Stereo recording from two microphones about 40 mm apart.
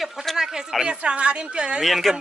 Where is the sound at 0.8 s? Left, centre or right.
Right.